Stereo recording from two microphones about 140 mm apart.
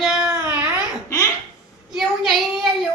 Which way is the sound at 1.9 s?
5° right (ahead or behind).